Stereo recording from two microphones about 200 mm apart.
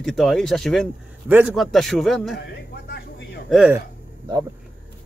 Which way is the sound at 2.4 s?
55° left (ahead or behind).